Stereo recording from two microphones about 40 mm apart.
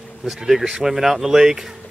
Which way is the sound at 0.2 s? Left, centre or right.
Centre.